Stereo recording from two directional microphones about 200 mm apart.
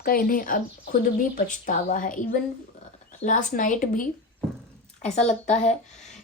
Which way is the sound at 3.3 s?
40° left (ahead or behind).